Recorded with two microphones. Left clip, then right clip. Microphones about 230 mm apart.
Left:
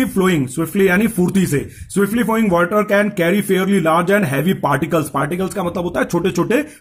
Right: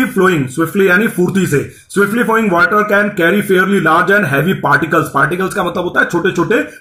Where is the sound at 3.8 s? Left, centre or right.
Left.